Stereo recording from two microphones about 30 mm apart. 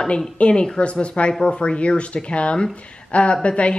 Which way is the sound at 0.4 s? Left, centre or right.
Left.